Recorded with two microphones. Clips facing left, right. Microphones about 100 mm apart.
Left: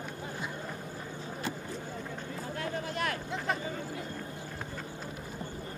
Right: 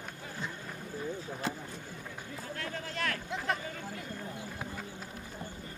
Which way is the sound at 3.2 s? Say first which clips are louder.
Left 1 dB; centre (ahead or behind).